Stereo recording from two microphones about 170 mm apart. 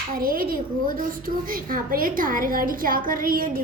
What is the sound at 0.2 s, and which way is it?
A woman's voice, 55° right (ahead or behind).